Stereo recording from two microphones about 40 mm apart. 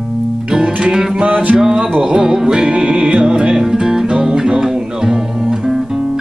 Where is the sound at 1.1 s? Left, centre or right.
Right.